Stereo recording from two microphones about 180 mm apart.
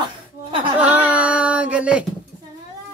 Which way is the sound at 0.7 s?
10° right (ahead or behind).